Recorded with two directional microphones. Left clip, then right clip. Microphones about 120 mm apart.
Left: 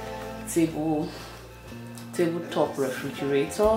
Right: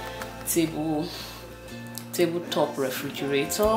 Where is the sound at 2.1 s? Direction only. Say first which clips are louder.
Right 1 dB; 20° right (ahead or behind).